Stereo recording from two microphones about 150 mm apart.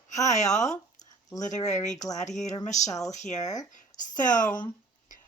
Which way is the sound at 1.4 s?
55° left (ahead or behind).